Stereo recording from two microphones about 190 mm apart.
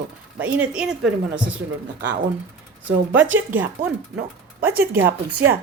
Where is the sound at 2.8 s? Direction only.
10° right (ahead or behind).